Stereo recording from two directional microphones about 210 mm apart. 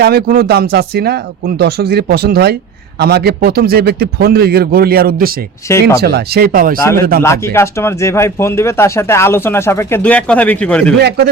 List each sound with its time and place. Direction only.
0.0 s speech: 50° right (ahead or behind)
5.6 s speech: 15° left (ahead or behind)
6.0 s speech: 50° right (ahead or behind)
7.2 s speech: 10° left (ahead or behind)